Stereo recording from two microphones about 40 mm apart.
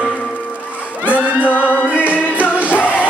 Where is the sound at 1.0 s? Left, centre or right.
Right.